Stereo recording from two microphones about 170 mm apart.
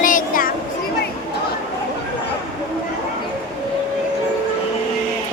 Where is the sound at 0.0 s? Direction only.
50° left (ahead or behind).